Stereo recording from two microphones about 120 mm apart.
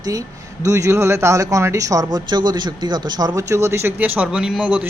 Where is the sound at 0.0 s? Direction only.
30° right (ahead or behind).